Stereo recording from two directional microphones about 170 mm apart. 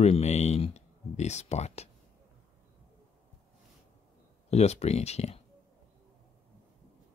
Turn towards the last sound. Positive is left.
turn(degrees=40)  # may be behind; listen again after turning